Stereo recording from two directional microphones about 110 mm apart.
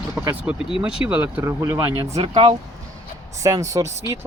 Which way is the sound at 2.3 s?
70° right (ahead or behind).